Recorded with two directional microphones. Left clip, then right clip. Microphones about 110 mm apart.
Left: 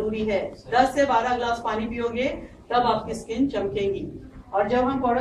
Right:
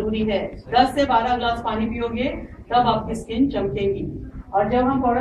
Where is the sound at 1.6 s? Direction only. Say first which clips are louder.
Right 2 dB; 25° left (ahead or behind).